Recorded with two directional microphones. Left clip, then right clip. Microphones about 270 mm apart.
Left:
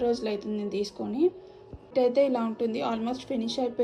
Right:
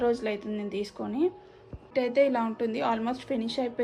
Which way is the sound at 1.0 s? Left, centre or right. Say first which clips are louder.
Left 2 dB; centre.